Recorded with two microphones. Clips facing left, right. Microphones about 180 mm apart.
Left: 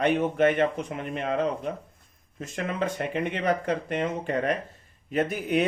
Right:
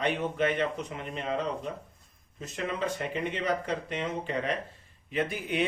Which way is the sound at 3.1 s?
55° left (ahead or behind).